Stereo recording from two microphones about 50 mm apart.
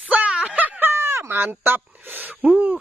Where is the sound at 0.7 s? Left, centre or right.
Right.